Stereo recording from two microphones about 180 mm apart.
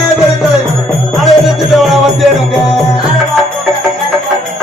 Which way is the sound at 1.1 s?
Centre (ahead or behind).